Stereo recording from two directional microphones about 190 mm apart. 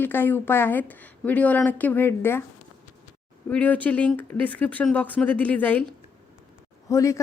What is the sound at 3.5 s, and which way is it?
Speech, 10° left (ahead or behind).